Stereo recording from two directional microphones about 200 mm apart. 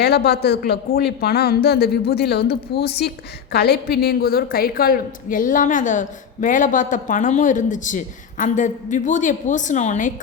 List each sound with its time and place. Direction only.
0.0 s a woman's voice: 55° left (ahead or behind); by 10.1 s 35° left (ahead or behind)